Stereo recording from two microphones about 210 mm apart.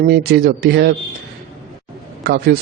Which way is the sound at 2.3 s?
50° right (ahead or behind).